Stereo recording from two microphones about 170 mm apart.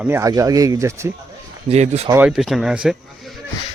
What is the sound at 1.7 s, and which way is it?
Speech, 40° right (ahead or behind).